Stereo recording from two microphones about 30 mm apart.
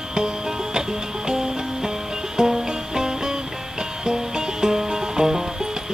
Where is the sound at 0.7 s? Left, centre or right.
Right.